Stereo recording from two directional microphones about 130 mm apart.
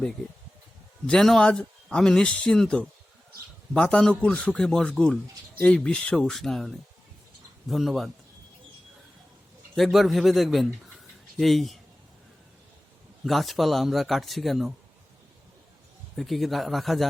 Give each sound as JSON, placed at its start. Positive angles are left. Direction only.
{"t": 1.0, "sound": "a man's voice", "side_deg": 5}
{"t": 9.7, "sound": "speech", "side_deg": 0}
{"t": 13.2, "sound": "speech", "side_deg": 0}
{"t": 16.1, "sound": "speech", "side_deg": 0}